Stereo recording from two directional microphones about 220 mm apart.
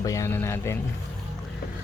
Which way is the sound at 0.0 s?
15° left (ahead or behind).